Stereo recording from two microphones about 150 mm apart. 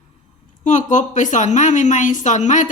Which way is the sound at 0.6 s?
55° left (ahead or behind).